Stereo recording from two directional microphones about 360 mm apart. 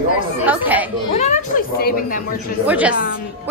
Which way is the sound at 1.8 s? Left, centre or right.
Left.